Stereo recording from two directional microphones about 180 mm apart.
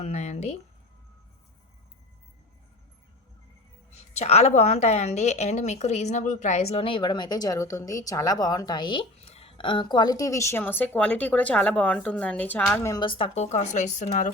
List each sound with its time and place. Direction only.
0.0 s speech: 40° left (ahead or behind)
4.1 s a woman's voice: 35° left (ahead or behind)